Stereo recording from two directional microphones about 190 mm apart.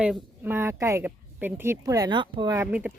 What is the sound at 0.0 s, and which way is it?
Speech, 10° right (ahead or behind).